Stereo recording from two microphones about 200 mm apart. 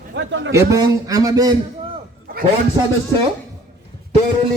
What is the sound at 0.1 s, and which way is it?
Speech, 65° right (ahead or behind).